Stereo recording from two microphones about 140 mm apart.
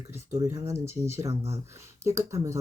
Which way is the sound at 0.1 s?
20° right (ahead or behind).